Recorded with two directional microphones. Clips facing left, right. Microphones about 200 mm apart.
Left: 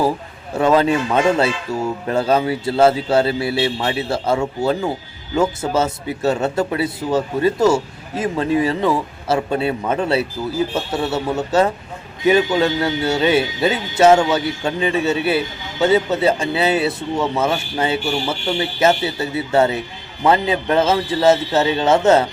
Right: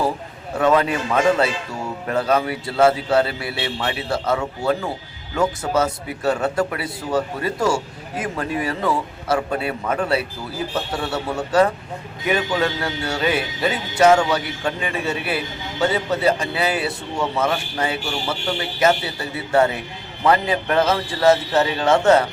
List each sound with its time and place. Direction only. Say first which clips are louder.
0.6 s speech: left 3 dB; 30° left (ahead or behind)